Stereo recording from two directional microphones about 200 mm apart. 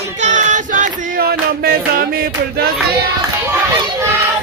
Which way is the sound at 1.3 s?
50° right (ahead or behind).